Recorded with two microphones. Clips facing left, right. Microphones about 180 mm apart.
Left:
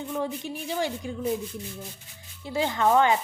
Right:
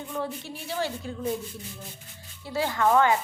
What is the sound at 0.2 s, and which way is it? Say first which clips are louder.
Speech: left 1 dB; 15° left (ahead or behind).